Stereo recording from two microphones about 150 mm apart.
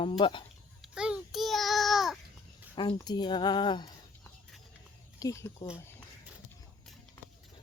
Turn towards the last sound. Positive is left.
turn(degrees=20)  # may be behind; listen again after turning